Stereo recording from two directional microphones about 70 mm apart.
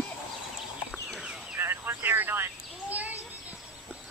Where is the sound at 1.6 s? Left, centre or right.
Right.